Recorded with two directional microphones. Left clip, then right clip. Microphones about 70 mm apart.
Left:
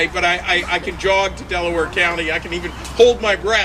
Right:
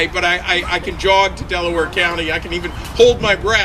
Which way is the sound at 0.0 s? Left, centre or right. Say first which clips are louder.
Right 1 dB; right.